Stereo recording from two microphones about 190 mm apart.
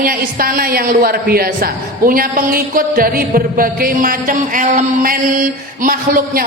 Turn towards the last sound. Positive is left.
turn(degrees=-50)  # may be behind; listen again after turning